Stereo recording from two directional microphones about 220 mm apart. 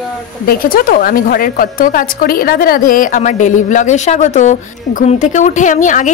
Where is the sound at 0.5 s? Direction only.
40° left (ahead or behind).